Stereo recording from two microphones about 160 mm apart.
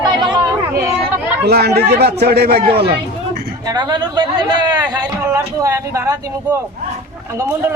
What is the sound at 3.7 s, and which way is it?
A man's voice, 25° right (ahead or behind).